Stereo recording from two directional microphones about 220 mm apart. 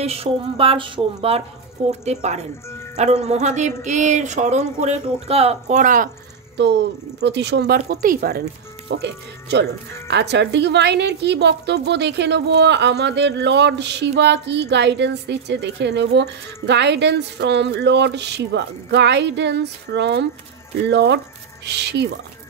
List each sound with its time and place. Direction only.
0.0 s a woman's voice: 25° right (ahead or behind)
6.5 s a woman's voice: 50° right (ahead or behind)